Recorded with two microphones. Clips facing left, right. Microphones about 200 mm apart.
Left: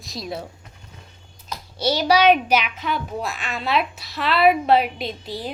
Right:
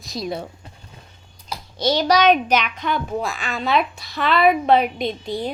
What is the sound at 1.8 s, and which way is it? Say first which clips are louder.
A woman's voice: right 1 dB; 10° left (ahead or behind).